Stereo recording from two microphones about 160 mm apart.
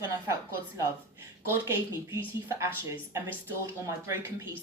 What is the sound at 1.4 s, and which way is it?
Speech, 15° right (ahead or behind).